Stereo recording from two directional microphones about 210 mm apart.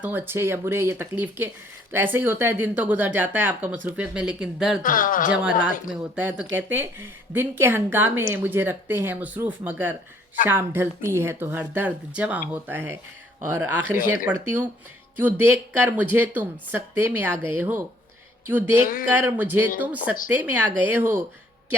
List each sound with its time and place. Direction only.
0.0 s speech: 10° right (ahead or behind)
4.8 s speech: 40° left (ahead or behind)
5.9 s speech: 10° right (ahead or behind)
13.9 s speech: 40° left (ahead or behind)
14.3 s speech: 10° right (ahead or behind)